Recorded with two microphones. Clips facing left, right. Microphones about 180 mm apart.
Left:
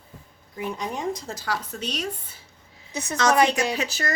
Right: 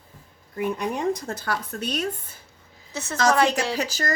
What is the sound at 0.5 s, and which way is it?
Speech, 55° right (ahead or behind).